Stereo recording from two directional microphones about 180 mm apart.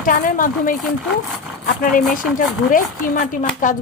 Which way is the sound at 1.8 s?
50° left (ahead or behind).